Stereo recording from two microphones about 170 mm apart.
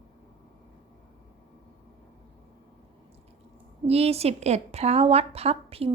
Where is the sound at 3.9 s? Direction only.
35° right (ahead or behind).